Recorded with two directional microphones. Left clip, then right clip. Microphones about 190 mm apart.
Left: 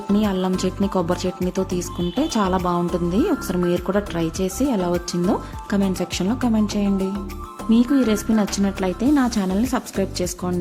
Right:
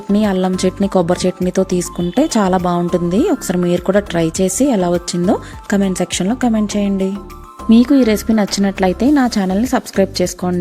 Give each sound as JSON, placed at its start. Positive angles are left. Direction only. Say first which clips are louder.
{"t": 0.2, "sound": "a woman's voice", "louder": "right 8 dB", "side_deg": -25}